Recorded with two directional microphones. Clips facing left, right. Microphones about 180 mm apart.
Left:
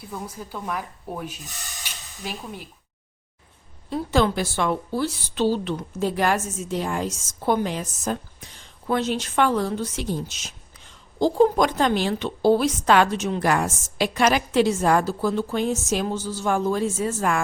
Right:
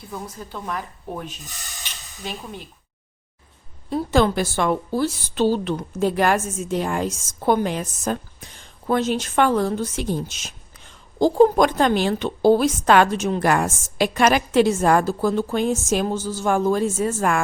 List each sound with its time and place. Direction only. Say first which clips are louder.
0.1 s a woman's voice: right 1 dB; 10° left (ahead or behind)
1.8 s hiss: right 1 dB; 5° left (ahead or behind)
3.8 s a woman's voice: right 3 dB; 50° right (ahead or behind)